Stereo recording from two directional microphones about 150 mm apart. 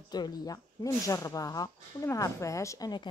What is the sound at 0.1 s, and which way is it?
A woman's voice, 25° left (ahead or behind).